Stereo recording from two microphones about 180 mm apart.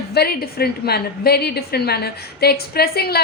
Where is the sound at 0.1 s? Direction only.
60° left (ahead or behind).